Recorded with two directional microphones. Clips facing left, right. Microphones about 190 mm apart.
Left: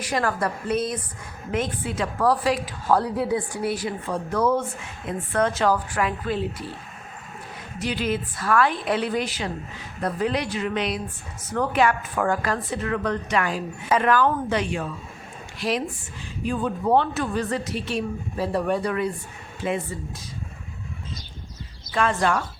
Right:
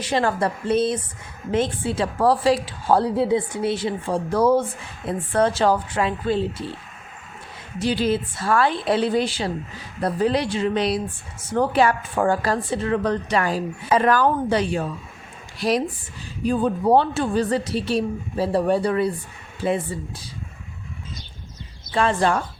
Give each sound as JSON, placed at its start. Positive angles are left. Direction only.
{"t": 0.0, "sound": "a woman's voice", "side_deg": -25}
{"t": 7.8, "sound": "a woman's voice", "side_deg": -30}
{"t": 21.9, "sound": "speech", "side_deg": -30}